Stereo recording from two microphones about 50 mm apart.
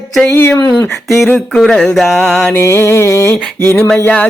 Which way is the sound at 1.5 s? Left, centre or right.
Centre.